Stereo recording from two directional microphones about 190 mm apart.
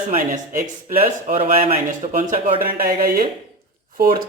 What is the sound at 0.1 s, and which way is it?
Speech, 45° right (ahead or behind).